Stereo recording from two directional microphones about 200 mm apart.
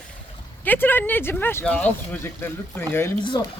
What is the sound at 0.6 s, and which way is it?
Speech, 10° left (ahead or behind).